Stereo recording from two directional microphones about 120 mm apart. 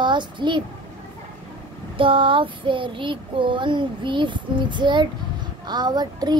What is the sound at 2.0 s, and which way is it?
A child's voice, 45° right (ahead or behind).